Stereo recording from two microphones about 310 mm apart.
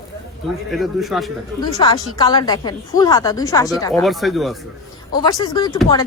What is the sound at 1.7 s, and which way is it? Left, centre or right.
Speech, centre.